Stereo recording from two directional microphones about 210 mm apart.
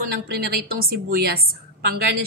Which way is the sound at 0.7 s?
45° right (ahead or behind).